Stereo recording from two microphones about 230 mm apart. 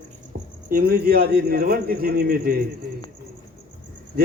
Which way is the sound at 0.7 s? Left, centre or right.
Right.